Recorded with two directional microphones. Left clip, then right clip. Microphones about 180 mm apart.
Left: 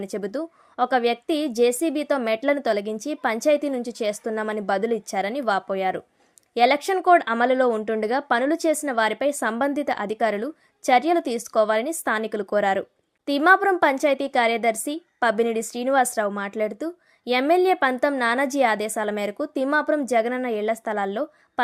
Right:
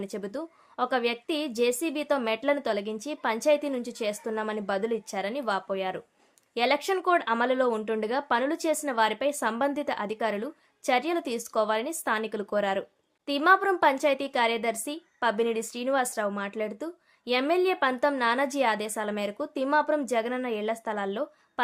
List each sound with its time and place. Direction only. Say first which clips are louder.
0.0 s a woman's voice: left 6 dB; 25° left (ahead or behind)